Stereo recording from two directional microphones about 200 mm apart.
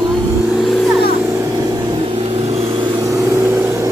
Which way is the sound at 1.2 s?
15° right (ahead or behind).